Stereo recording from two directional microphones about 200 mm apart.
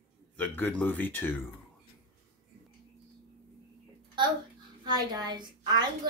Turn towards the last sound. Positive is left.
turn(degrees=-20)  # may be behind; listen again after turning